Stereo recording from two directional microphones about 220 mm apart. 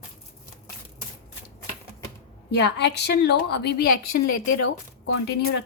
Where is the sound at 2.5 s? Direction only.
50° left (ahead or behind).